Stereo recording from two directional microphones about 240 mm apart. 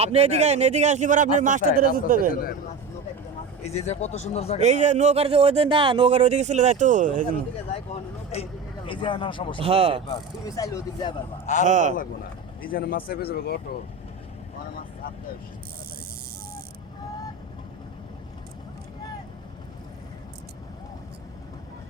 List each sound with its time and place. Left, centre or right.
0.0 s a man's voice: right
2.3 s speech: left
3.6 s speech: left
4.6 s speech: right
7.7 s vehicle: left
8.9 s speech: left
9.6 s speech: right
10.4 s speech: centre
11.6 s a man's voice: right
12.6 s speech: left